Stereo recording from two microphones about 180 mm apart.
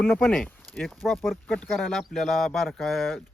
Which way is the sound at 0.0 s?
10° left (ahead or behind).